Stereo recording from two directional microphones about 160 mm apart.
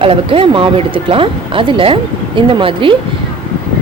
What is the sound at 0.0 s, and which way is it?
Speech, 35° right (ahead or behind).